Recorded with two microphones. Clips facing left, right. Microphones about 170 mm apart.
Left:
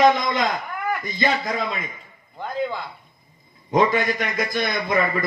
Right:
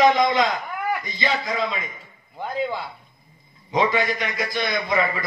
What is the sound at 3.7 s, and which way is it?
A man's voice, 50° left (ahead or behind).